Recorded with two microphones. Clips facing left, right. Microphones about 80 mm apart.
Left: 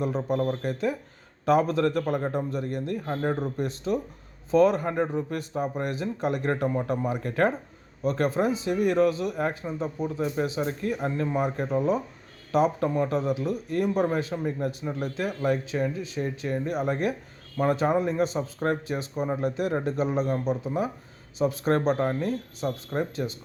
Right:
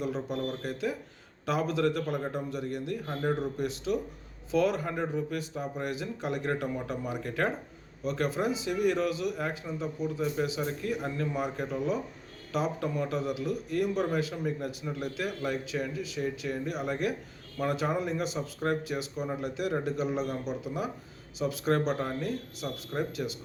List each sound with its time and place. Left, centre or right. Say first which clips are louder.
0.0 s speech: left 6 dB; left